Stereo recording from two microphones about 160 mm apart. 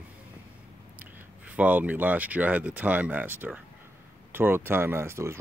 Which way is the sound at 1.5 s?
10° right (ahead or behind).